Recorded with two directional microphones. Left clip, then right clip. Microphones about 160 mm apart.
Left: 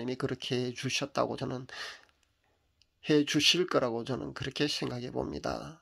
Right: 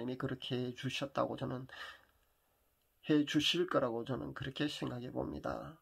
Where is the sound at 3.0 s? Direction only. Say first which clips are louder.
Left 7 dB; 30° left (ahead or behind).